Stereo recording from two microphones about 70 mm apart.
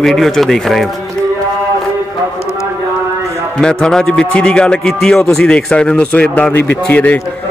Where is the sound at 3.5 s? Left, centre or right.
Centre.